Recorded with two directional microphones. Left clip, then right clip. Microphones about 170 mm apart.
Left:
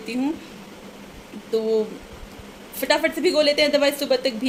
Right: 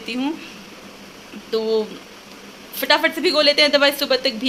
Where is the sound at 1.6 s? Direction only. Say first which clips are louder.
Right 2 dB; 15° right (ahead or behind).